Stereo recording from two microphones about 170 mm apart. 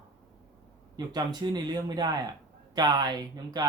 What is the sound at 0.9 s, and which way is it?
Speech, 25° right (ahead or behind).